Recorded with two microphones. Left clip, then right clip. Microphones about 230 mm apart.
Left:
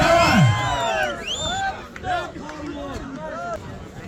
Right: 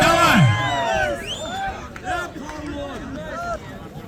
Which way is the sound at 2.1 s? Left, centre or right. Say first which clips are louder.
Left 1 dB; right.